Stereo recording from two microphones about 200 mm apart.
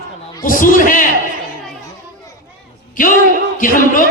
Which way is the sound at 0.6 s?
40° left (ahead or behind).